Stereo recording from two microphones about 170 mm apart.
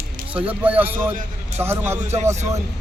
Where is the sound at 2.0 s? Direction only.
40° right (ahead or behind).